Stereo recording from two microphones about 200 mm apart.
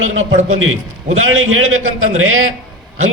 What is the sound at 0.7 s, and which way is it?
A man's voice, 90° right.